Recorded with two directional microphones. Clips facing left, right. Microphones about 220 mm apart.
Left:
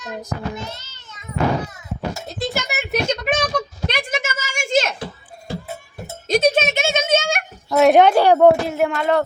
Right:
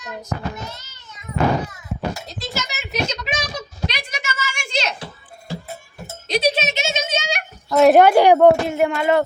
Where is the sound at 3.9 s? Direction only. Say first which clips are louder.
Left 6 dB; 50° left (ahead or behind).